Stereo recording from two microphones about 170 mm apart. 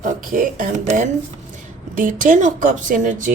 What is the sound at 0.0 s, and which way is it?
Speech, 50° right (ahead or behind).